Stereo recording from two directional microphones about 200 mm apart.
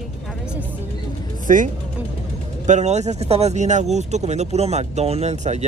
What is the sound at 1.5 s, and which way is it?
Speech, 40° right (ahead or behind).